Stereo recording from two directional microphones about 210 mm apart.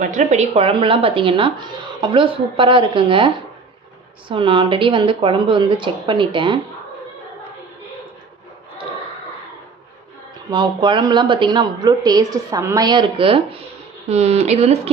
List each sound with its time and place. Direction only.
0.0 s a woman's voice: 35° right (ahead or behind)
10.5 s a woman's voice: 20° right (ahead or behind)